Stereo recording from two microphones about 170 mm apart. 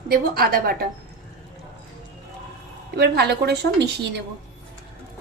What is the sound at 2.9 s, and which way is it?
Speech, 75° right (ahead or behind).